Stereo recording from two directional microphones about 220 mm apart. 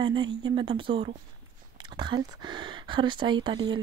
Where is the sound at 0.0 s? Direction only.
20° right (ahead or behind).